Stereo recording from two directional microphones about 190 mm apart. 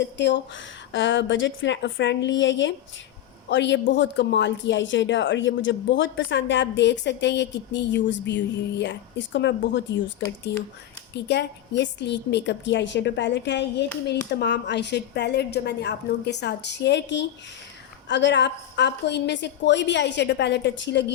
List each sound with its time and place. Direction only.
0.2 s a woman's voice: 70° left (ahead or behind)